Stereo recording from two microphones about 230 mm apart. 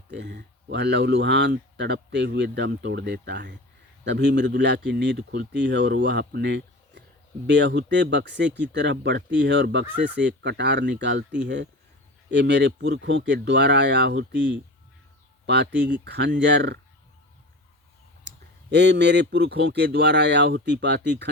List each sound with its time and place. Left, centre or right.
0.1 s speech: right
15.4 s speech: right
18.3 s speech: right